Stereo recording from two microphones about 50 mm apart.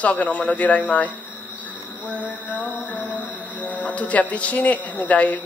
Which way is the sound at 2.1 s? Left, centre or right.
Left.